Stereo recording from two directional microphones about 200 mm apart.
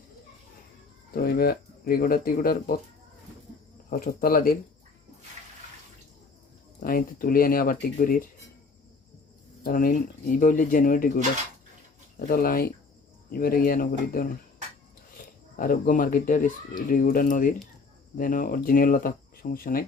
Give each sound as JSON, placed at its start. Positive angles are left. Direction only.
{"t": 1.1, "sound": "speech", "side_deg": 50}
{"t": 3.8, "sound": "speech", "side_deg": 45}
{"t": 6.7, "sound": "speech", "side_deg": 45}
{"t": 9.6, "sound": "speech", "side_deg": 45}
{"t": 12.3, "sound": "speech", "side_deg": 45}
{"t": 15.5, "sound": "speech", "side_deg": 45}